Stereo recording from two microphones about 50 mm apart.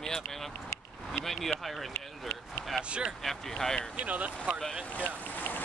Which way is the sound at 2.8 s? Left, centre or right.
Right.